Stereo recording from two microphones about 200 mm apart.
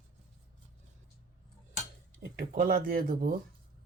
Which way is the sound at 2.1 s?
45° right (ahead or behind).